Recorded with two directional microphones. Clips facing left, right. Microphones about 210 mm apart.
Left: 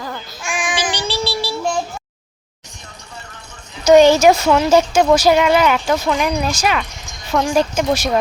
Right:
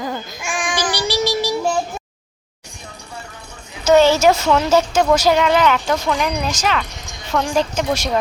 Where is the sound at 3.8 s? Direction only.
15° left (ahead or behind).